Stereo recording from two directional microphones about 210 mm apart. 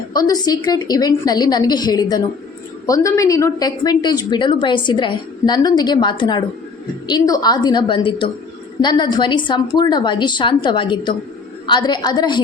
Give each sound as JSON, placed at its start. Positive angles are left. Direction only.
{"t": 0.1, "sound": "a woman's voice", "side_deg": 20}